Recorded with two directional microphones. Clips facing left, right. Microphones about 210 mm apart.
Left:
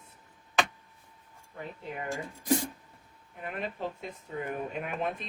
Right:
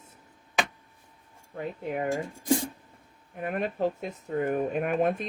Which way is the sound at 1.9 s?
45° right (ahead or behind).